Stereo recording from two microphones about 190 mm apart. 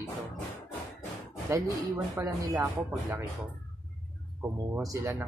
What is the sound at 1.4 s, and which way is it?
A woman's voice, 15° right (ahead or behind).